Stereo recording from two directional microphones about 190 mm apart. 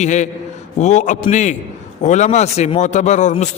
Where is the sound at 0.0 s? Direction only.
40° left (ahead or behind).